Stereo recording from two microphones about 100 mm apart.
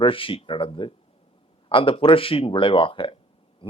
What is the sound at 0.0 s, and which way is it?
Speech, 60° left (ahead or behind).